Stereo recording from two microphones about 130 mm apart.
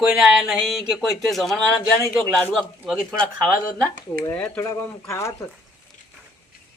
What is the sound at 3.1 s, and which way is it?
Speech, 10° left (ahead or behind).